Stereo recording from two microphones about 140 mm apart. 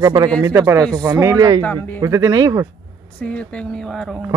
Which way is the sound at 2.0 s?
25° right (ahead or behind).